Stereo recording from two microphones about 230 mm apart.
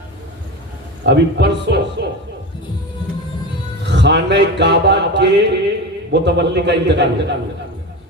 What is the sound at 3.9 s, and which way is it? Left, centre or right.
A man's voice, right.